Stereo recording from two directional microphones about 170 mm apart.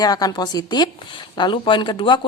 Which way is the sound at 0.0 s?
20° left (ahead or behind).